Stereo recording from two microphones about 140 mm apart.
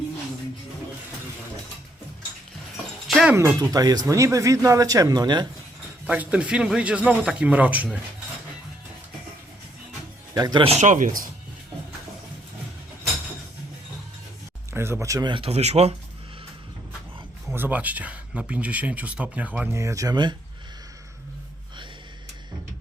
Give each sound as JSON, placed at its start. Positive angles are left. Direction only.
{"t": 3.1, "sound": "music", "side_deg": 0}
{"t": 3.3, "sound": "speech", "side_deg": -25}
{"t": 6.1, "sound": "speech", "side_deg": -10}
{"t": 10.3, "sound": "speech", "side_deg": -25}
{"t": 10.6, "sound": "speech", "side_deg": -50}
{"t": 14.7, "sound": "speech", "side_deg": -15}
{"t": 15.3, "sound": "speech", "side_deg": -45}
{"t": 17.5, "sound": "speech", "side_deg": -10}